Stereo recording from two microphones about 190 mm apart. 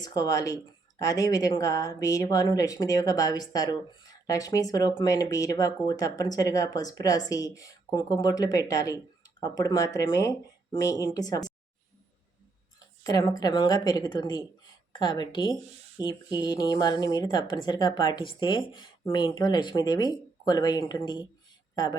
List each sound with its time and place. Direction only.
0.0 s speech: 20° left (ahead or behind)
13.1 s speech: 20° left (ahead or behind)